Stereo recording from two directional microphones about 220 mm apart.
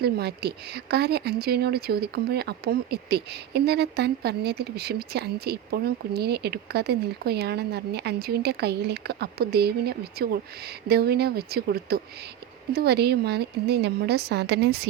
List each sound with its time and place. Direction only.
0.0 s speech: 45° right (ahead or behind)